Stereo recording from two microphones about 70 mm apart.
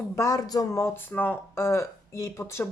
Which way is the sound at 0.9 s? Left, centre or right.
Left.